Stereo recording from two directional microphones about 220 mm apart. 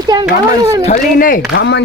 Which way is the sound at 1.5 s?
55° left (ahead or behind).